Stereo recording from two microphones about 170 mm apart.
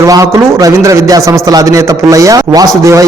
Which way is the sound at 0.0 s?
20° right (ahead or behind).